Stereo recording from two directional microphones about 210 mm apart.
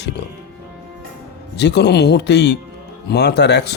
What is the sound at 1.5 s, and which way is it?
Speech, 55° left (ahead or behind).